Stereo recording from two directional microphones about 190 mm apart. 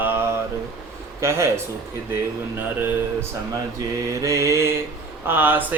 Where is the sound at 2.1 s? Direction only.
10° right (ahead or behind).